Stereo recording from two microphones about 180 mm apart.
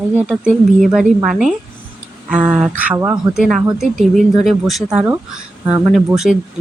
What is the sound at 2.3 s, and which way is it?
Speech, 5° right (ahead or behind).